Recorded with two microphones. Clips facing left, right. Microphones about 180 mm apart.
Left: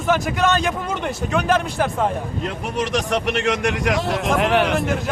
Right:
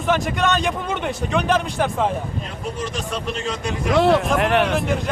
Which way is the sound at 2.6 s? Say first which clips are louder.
Left 5 dB; 80° left.